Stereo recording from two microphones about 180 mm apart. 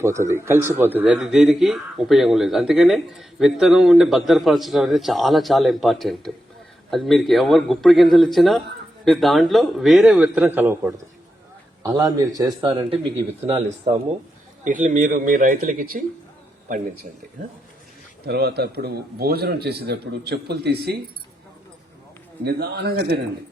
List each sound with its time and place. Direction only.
0.0 s a man's voice: 15° right (ahead or behind)
13.4 s speech: 35° right (ahead or behind); by 17.1 s 55° right (ahead or behind)
18.3 s a man's voice: 65° right (ahead or behind)
22.4 s a man's voice: 60° right (ahead or behind)